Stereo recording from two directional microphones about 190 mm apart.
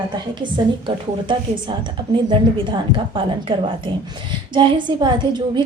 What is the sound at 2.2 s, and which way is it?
A woman's voice, 25° right (ahead or behind).